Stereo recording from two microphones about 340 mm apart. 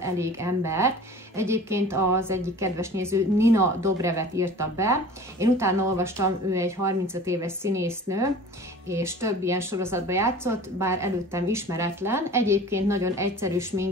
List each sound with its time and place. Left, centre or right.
0.0 s speech: centre